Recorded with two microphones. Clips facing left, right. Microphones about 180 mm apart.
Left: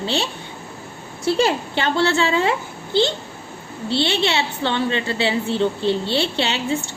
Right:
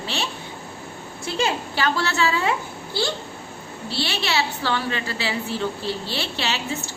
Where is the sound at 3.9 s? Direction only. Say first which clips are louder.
Left 6 dB; 25° left (ahead or behind).